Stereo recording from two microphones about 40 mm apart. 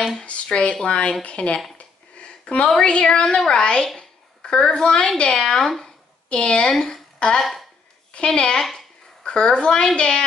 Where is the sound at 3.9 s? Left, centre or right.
Left.